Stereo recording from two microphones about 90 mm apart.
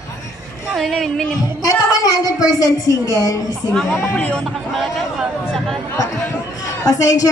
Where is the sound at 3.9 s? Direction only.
20° left (ahead or behind).